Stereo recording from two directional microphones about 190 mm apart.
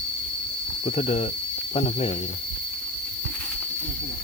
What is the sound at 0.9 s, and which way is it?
Speech, 35° left (ahead or behind).